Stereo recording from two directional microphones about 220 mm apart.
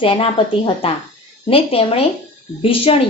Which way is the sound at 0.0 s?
25° left (ahead or behind).